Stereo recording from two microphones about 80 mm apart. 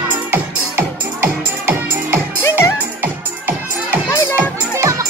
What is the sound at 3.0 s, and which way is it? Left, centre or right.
Music, right.